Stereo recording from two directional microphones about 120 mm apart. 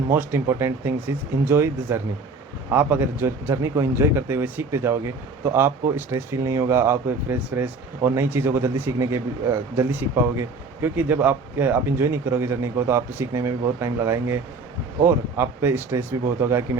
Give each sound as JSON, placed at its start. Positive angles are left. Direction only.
{"t": 0.1, "sound": "a man's voice", "side_deg": -20}